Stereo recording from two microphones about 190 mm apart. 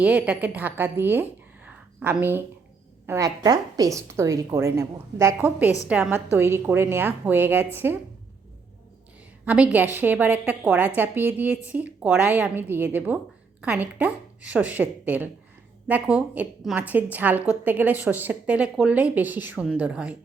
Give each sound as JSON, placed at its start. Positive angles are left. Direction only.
{"t": 0.0, "sound": "a woman's voice", "side_deg": -5}
{"t": 9.4, "sound": "a woman's voice", "side_deg": -10}